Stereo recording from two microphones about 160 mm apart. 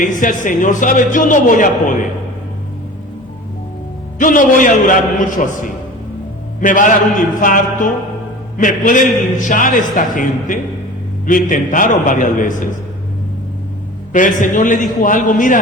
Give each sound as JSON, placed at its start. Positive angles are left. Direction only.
{"t": 0.0, "sound": "a man's voice", "side_deg": 55}
{"t": 4.2, "sound": "a man's voice", "side_deg": 55}
{"t": 14.1, "sound": "a man's voice", "side_deg": 55}